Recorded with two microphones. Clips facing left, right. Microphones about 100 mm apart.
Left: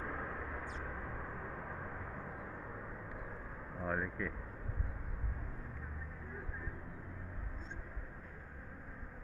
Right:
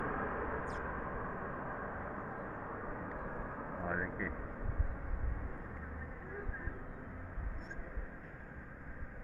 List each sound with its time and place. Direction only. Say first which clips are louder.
0.0 s gong: right 5 dB; 40° right (ahead or behind)
3.9 s speech: left 2 dB; 5° right (ahead or behind)